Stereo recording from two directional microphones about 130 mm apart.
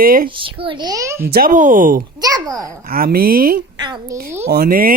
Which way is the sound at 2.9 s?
90° right.